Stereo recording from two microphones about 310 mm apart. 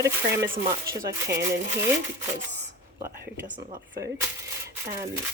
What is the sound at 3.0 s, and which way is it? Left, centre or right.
Speech, centre.